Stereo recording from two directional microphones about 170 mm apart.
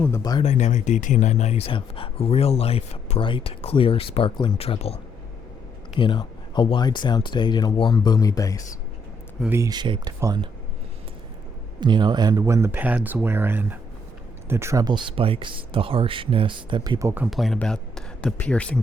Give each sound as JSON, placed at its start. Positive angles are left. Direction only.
{"t": 0.2, "sound": "speech", "side_deg": 25}
{"t": 0.4, "sound": "speech", "side_deg": 40}
{"t": 6.0, "sound": "speech", "side_deg": 25}
{"t": 9.5, "sound": "speech", "side_deg": -20}
{"t": 11.8, "sound": "speech", "side_deg": -25}
{"t": 17.2, "sound": "speech", "side_deg": 0}